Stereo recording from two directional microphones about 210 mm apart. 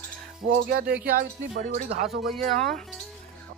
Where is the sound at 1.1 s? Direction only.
40° right (ahead or behind).